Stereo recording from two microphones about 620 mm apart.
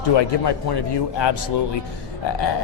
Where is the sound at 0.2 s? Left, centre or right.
Left.